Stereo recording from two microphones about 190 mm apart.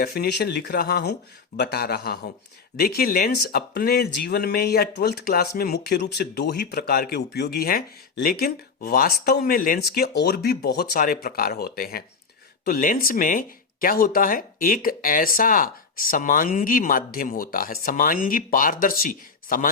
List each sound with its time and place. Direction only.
0.0 s speech: 55° left (ahead or behind)